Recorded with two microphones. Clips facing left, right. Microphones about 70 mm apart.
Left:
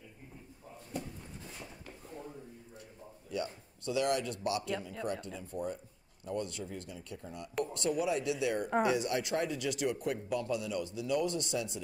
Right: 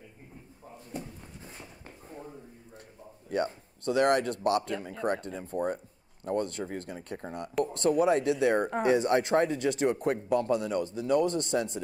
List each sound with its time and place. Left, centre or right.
1.4 s drawer open or close: right
3.3 s speech: right
7.6 s speech: right